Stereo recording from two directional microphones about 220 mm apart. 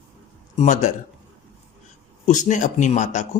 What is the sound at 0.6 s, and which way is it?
Speech, 35° left (ahead or behind).